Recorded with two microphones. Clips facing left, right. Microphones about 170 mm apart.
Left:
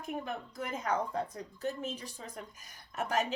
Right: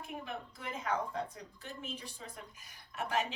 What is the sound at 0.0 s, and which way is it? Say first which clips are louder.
A woman's voice: left 5 dB; 40° left (ahead or behind).